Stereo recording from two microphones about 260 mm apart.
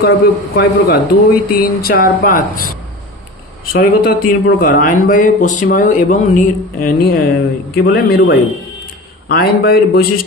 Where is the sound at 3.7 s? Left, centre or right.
Left.